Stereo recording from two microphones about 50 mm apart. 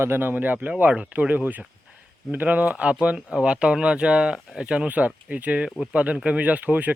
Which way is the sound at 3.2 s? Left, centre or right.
Centre.